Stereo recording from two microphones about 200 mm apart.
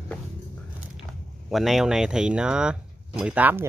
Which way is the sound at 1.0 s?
Centre (ahead or behind).